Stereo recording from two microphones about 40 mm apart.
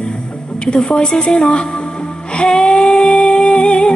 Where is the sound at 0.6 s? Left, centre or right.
Left.